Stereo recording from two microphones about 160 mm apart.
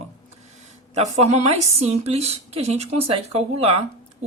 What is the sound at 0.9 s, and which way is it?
Speech, 45° right (ahead or behind).